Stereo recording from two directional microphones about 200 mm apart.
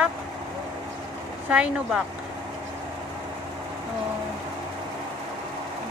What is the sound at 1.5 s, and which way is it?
Speech, 5° right (ahead or behind).